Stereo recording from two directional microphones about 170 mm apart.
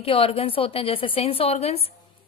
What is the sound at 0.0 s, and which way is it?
A woman's voice, 35° left (ahead or behind).